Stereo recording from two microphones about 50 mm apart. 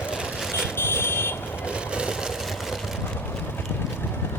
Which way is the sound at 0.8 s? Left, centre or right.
Left.